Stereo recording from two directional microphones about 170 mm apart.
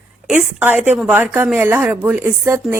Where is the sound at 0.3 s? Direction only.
5° right (ahead or behind).